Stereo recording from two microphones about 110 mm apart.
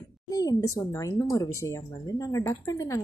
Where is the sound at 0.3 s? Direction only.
35° left (ahead or behind).